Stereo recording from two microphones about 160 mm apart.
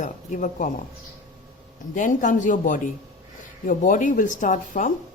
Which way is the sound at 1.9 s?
55° left (ahead or behind).